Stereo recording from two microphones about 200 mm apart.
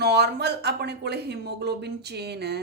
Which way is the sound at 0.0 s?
55° right (ahead or behind).